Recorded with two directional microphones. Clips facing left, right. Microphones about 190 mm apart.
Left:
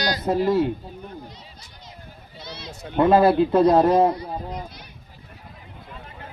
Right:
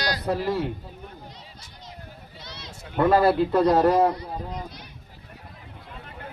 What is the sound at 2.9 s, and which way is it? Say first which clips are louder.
Speech: left 3 dB; 25° left (ahead or behind).